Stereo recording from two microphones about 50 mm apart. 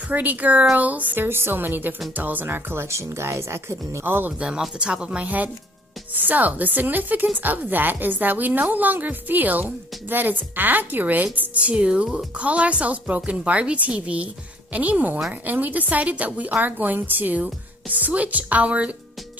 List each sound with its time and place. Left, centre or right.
0.1 s a woman's voice: right
1.1 s a woman's voice: right
2.9 s speech: right
4.0 s a woman's voice: right
4.4 s speech: centre
6.1 s a woman's voice: right
11.7 s a woman's voice: right